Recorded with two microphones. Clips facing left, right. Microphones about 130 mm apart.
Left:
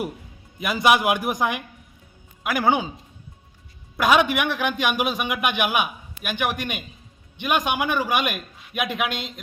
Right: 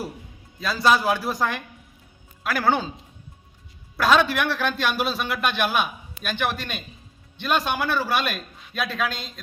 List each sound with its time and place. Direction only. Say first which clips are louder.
0.6 s a man's voice: left 1 dB; 15° left (ahead or behind)
3.9 s a man's voice: left 1 dB; 15° left (ahead or behind)